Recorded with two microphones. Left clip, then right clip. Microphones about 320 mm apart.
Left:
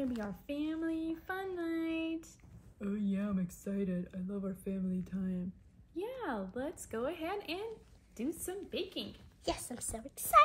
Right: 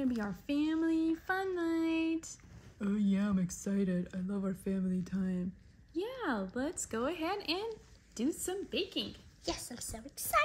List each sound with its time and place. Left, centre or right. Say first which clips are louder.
0.0 s a sound: right 3 dB; right
5.9 s a woman's voice: right 3 dB; right
9.4 s a woman's voice: left 1 dB; left